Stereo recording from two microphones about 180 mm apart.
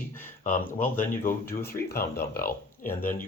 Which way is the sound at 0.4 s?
50° left (ahead or behind).